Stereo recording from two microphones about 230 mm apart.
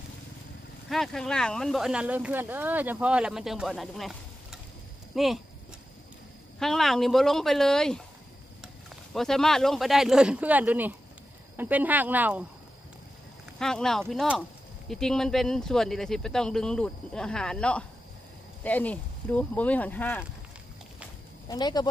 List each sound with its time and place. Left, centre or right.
0.8 s speech: centre
6.6 s speech: centre
9.1 s speech: centre
13.6 s speech: centre
21.5 s speech: centre